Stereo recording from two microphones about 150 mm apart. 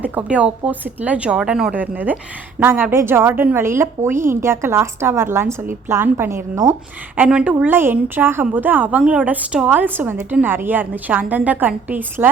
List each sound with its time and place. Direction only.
0.0 s a woman's voice: 10° right (ahead or behind)